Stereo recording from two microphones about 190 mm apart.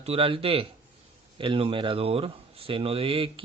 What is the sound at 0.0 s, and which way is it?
Speech, 30° right (ahead or behind).